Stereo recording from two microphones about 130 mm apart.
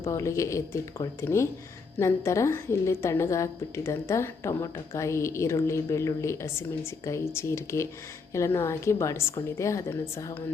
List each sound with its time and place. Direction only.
0.0 s a woman's voice: 25° left (ahead or behind)